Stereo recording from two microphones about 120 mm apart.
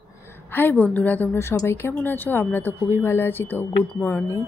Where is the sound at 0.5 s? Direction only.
15° left (ahead or behind).